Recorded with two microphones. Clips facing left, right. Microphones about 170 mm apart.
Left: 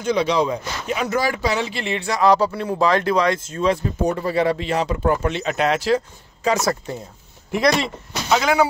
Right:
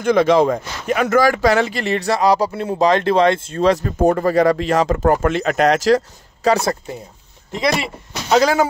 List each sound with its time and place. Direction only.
0.0 s speech: 50° right (ahead or behind)
1.8 s a man's voice: 40° right (ahead or behind)
2.2 s speech: 10° right (ahead or behind)
2.5 s speech: 20° right (ahead or behind); by 3.8 s 40° right (ahead or behind)
3.8 s a man's voice: 55° right (ahead or behind); by 6.8 s 35° right (ahead or behind)
8.3 s a man's voice: 40° right (ahead or behind)